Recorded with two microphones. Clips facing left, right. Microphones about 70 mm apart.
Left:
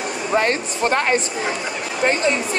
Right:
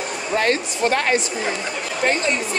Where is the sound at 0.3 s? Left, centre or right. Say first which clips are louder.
Left 1 dB; left.